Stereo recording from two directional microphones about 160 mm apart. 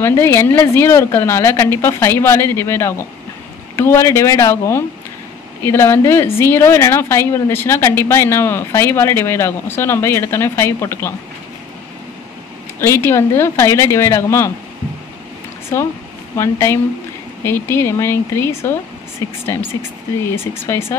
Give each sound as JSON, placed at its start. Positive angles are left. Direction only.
{"t": 0.0, "sound": "a woman's voice", "side_deg": 15}
{"t": 12.8, "sound": "a woman's voice", "side_deg": 15}
{"t": 15.7, "sound": "a woman's voice", "side_deg": 15}